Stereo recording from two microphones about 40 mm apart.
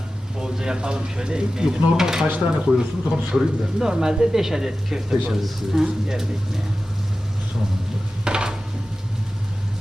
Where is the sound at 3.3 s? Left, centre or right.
Centre.